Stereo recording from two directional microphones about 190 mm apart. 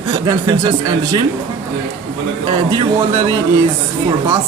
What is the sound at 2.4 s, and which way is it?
Speech, 20° right (ahead or behind).